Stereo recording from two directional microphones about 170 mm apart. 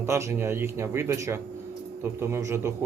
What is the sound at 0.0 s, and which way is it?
A man's voice, 15° right (ahead or behind).